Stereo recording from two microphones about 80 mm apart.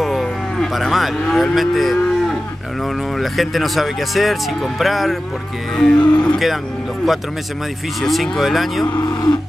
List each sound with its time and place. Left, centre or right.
0.0 s moo: centre
2.8 s speech: centre
5.8 s cattle: centre
8.0 s speech: centre
8.9 s speech: left